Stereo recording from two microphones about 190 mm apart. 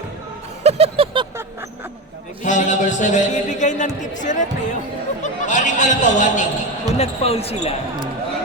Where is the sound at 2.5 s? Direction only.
40° left (ahead or behind).